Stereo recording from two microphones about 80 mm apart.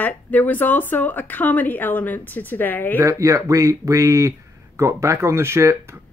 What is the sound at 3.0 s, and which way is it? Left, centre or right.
Speech, right.